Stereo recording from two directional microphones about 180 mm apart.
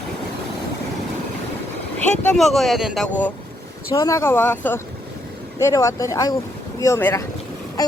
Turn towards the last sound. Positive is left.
turn(degrees=20)  # may be behind; listen again after turning